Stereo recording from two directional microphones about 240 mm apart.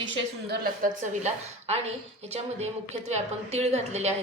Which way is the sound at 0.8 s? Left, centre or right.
Right.